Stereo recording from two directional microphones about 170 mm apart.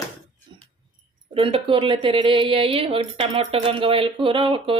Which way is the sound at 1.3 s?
30° right (ahead or behind).